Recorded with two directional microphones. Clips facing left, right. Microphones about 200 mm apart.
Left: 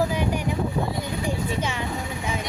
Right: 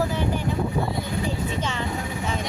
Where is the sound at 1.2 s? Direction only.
10° left (ahead or behind).